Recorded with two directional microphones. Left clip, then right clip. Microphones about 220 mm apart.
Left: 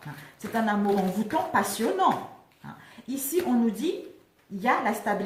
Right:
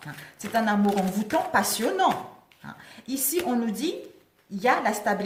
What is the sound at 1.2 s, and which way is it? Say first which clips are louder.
Speech: right 5 dB; 45° right (ahead or behind).